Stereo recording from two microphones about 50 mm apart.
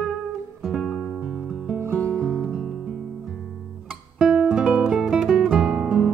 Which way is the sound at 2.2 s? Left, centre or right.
Centre.